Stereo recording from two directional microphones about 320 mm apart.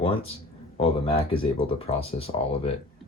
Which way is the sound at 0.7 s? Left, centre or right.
Centre.